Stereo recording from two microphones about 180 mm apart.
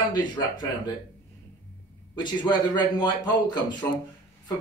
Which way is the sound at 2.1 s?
25° left (ahead or behind).